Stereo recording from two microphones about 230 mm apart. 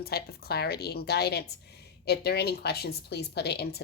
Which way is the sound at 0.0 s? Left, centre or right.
Left.